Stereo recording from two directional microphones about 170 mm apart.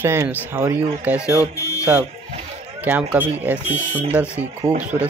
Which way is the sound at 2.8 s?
10° right (ahead or behind).